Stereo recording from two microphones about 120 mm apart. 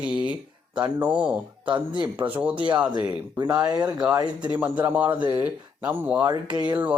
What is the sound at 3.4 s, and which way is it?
Speech, 30° right (ahead or behind).